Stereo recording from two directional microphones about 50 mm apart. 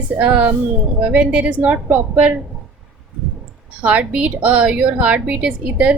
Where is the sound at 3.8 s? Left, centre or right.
Right.